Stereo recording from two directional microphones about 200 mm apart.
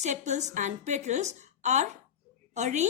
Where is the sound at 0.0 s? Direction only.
35° right (ahead or behind).